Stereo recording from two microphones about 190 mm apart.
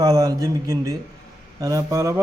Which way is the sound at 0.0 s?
15° right (ahead or behind).